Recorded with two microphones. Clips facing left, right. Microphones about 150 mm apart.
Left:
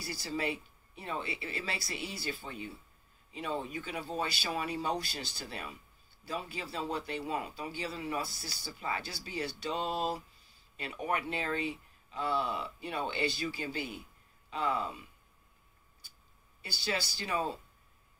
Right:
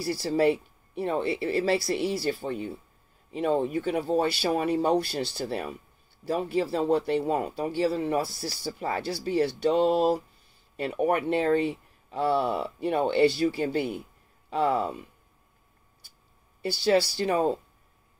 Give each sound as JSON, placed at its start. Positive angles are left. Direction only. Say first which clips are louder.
{"t": 0.0, "sound": "speech", "louder": "right 12 dB", "side_deg": -60}
{"t": 16.6, "sound": "speech", "louder": "right 14 dB", "side_deg": -60}